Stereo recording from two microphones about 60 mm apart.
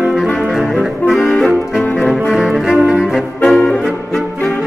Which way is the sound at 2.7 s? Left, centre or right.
Centre.